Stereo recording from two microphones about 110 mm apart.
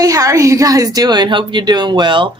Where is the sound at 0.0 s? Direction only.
30° right (ahead or behind).